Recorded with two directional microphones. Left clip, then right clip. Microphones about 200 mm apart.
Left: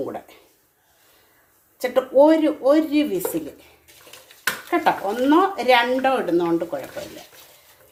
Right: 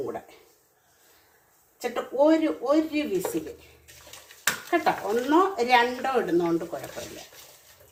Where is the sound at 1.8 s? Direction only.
50° left (ahead or behind).